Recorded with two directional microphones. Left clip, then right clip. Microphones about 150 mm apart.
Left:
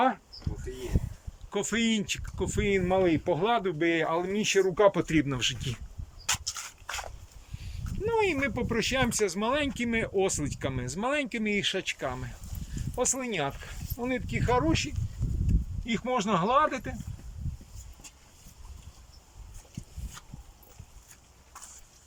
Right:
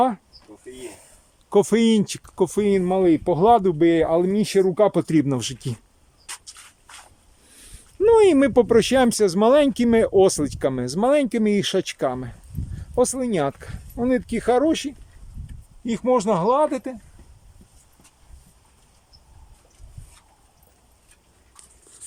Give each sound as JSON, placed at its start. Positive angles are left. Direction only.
{"t": 1.5, "sound": "speech", "side_deg": -55}
{"t": 6.2, "sound": "dog", "side_deg": 90}
{"t": 7.5, "sound": "speech", "side_deg": -65}
{"t": 15.9, "sound": "speech", "side_deg": -45}